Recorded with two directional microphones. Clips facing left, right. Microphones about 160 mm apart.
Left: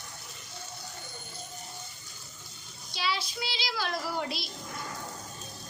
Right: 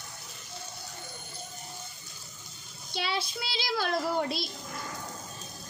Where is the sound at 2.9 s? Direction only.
55° right (ahead or behind).